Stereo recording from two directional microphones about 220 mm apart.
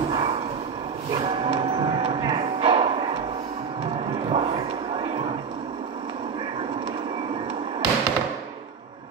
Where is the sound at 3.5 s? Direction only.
25° right (ahead or behind).